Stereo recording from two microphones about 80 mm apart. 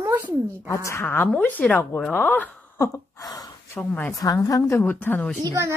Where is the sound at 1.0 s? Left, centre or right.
Left.